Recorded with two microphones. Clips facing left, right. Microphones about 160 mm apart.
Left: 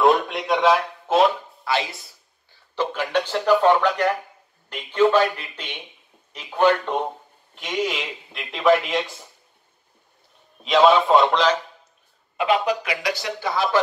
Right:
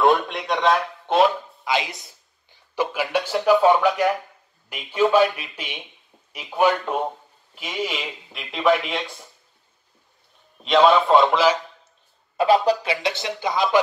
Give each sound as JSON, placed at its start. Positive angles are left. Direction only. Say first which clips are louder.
{"t": 0.0, "sound": "a man's voice", "louder": "left 1 dB", "side_deg": 0}
{"t": 1.6, "sound": "a man's voice", "louder": "even", "side_deg": -15}
{"t": 10.6, "sound": "a man's voice", "louder": "even", "side_deg": 0}
{"t": 12.4, "sound": "speech", "louder": "right 3 dB", "side_deg": -35}